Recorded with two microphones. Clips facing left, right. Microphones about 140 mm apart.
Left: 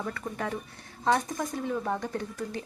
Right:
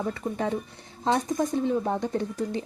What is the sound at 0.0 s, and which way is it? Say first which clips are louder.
Speech: right 5 dB; 25° right (ahead or behind).